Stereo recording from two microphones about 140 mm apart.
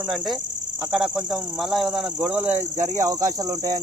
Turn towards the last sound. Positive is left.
turn(degrees=-25)  # may be behind; listen again after turning